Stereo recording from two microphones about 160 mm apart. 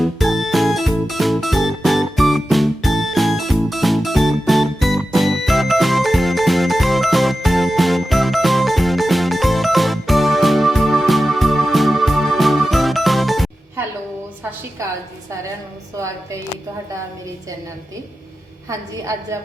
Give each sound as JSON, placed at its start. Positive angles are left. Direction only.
{"t": 0.0, "sound": "music", "side_deg": 0}
{"t": 14.8, "sound": "a sound", "side_deg": -20}
{"t": 18.7, "sound": "a woman's voice", "side_deg": -20}